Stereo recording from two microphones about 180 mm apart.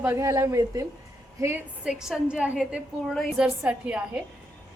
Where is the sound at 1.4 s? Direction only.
10° right (ahead or behind).